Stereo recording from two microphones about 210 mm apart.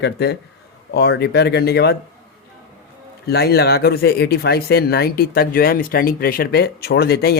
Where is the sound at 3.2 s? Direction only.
50° left (ahead or behind).